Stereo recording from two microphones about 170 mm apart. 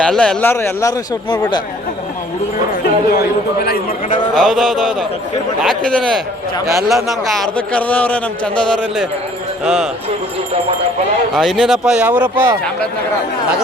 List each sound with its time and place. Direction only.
0.0 s a man's voice: 5° left (ahead or behind); by 1.6 s 25° left (ahead or behind)
2.8 s a man's voice: 65° left (ahead or behind)
4.4 s a man's voice: centre (ahead or behind)
11.3 s speech: centre (ahead or behind)